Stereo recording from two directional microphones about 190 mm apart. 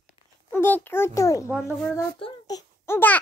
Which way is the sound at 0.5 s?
10° left (ahead or behind).